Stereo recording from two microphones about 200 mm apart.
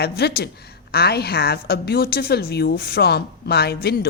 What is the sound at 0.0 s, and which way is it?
A woman's voice, 55° left (ahead or behind).